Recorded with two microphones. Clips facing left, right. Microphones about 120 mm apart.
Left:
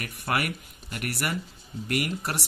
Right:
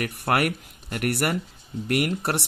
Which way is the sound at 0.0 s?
60° right (ahead or behind).